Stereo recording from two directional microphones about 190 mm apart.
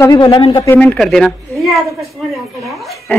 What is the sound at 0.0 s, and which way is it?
Speech, 20° left (ahead or behind).